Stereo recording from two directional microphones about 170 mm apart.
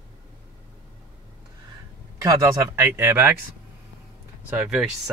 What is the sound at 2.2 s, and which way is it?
Speech, 20° right (ahead or behind).